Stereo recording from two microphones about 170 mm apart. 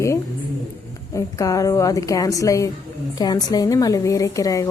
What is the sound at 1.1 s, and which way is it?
Speech, 20° left (ahead or behind).